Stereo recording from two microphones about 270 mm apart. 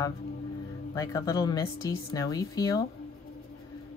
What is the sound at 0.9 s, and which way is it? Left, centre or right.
Speech, centre.